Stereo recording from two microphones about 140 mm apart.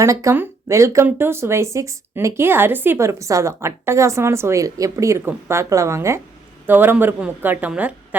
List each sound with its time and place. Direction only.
0.0 s a woman's voice: 20° right (ahead or behind)